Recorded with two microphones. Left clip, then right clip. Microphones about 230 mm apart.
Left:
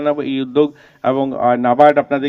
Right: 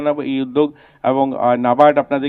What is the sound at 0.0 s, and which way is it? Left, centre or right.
Speech, left.